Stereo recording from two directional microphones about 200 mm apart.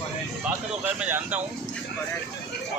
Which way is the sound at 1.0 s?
10° right (ahead or behind).